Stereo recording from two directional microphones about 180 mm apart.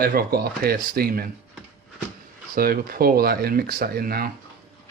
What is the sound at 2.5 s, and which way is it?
Speech, 55° right (ahead or behind).